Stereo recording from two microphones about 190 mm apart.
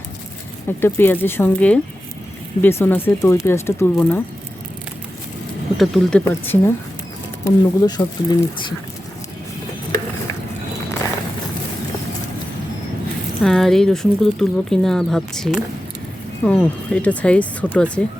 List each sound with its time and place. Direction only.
0.8 s speech: 10° left (ahead or behind)
5.7 s speech: centre (ahead or behind); by 8.7 s 20° left (ahead or behind)
13.4 s speech: centre (ahead or behind)